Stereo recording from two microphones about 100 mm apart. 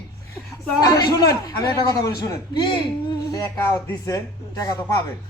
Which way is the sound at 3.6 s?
25° left (ahead or behind).